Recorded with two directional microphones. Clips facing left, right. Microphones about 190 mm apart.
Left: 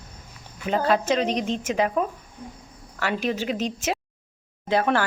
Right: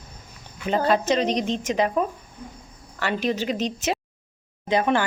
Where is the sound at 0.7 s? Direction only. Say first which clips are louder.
Right 1 dB; 5° left (ahead or behind).